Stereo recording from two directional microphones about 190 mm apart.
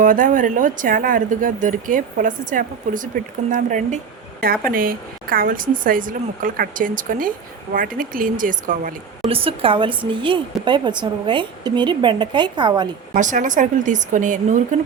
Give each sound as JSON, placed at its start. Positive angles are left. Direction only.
{"t": 0.0, "sound": "a woman's voice", "side_deg": -45}
{"t": 9.3, "sound": "a woman's voice", "side_deg": -30}
{"t": 13.1, "sound": "speech", "side_deg": -40}